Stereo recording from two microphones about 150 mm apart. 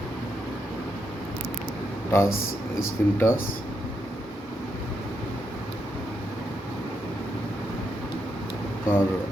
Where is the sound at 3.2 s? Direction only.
15° left (ahead or behind).